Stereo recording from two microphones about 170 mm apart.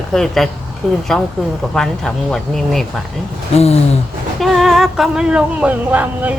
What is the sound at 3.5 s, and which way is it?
Speech, 35° left (ahead or behind).